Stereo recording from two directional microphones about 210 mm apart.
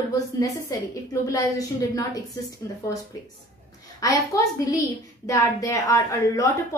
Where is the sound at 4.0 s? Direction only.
15° left (ahead or behind).